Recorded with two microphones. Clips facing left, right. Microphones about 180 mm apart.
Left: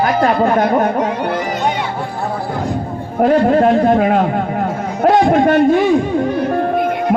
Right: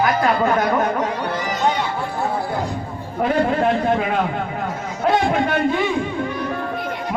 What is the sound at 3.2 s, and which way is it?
A man's voice, 55° left (ahead or behind).